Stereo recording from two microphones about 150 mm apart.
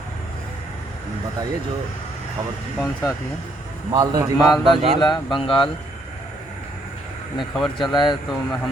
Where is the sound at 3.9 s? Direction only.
25° right (ahead or behind).